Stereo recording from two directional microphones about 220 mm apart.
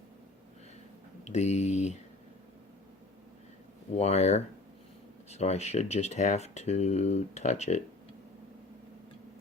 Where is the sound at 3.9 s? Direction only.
30° left (ahead or behind).